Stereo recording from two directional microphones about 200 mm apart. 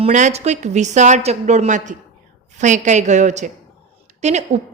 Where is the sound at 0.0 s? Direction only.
35° right (ahead or behind).